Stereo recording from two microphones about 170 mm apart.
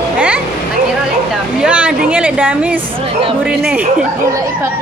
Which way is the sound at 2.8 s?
30° right (ahead or behind).